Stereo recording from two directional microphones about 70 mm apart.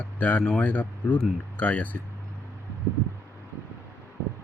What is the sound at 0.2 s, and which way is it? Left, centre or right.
Speech, left.